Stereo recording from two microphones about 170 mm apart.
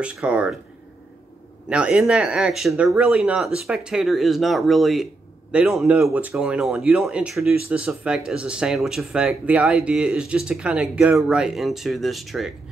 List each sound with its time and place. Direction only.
0.0 s speech: 5° right (ahead or behind)
1.7 s speech: 5° right (ahead or behind)